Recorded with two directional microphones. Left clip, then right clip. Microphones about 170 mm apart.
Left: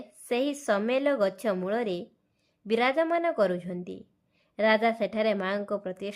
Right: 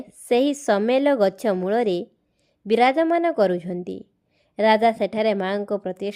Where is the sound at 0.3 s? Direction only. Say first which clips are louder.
Right 8 dB; 35° right (ahead or behind).